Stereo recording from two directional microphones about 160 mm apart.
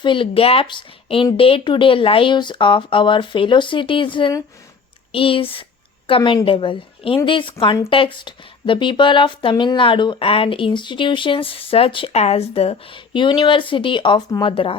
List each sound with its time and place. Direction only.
0.0 s a woman's voice: 30° left (ahead or behind)